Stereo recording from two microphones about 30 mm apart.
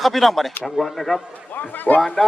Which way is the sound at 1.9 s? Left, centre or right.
Left.